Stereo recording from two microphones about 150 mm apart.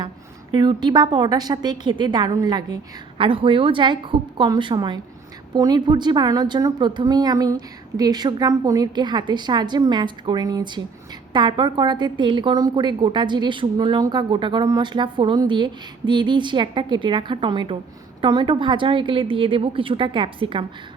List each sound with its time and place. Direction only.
0.5 s a woman's voice: 30° right (ahead or behind)